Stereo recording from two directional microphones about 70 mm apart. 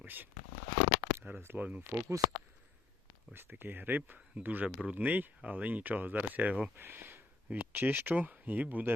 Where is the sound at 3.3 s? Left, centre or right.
Right.